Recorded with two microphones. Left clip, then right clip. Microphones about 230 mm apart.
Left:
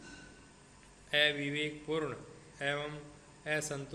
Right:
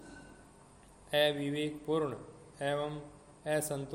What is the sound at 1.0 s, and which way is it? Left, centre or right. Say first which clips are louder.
Speech: even; right.